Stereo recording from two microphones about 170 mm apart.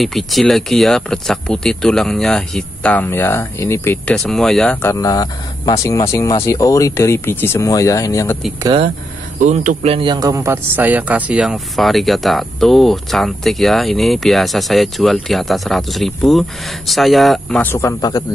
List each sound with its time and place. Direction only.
0.0 s speech: centre (ahead or behind)
4.2 s speech: centre (ahead or behind)
4.8 s speech: 20° left (ahead or behind)
8.6 s speech: 35° right (ahead or behind)
9.4 s speech: 45° right (ahead or behind)
9.9 s speech: 25° right (ahead or behind); by 18.2 s 20° left (ahead or behind)